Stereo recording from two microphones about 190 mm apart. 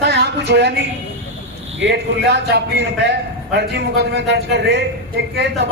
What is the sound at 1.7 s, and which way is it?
Speech, 65° right (ahead or behind).